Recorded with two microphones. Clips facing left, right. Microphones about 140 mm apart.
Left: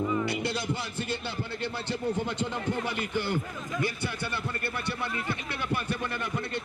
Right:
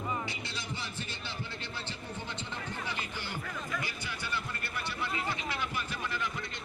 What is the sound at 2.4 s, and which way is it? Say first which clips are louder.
Speech: left 10 dB; 55° left (ahead or behind).